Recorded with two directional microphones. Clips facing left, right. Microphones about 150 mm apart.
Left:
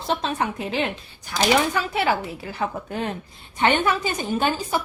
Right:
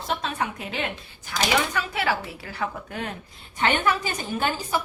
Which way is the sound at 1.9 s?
25° left (ahead or behind).